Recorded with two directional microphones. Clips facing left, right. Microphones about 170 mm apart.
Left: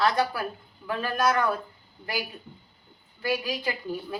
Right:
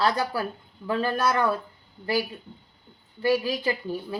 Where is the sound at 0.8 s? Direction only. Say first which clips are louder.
Right 2 dB; 30° right (ahead or behind).